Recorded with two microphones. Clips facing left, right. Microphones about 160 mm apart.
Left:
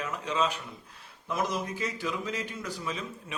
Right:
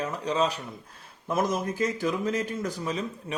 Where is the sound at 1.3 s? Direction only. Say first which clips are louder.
Right 4 dB; 45° right (ahead or behind).